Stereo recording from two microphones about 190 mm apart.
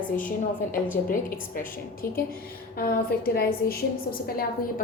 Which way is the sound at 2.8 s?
50° left (ahead or behind).